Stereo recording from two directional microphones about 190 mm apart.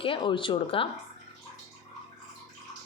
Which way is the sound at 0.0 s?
25° left (ahead or behind).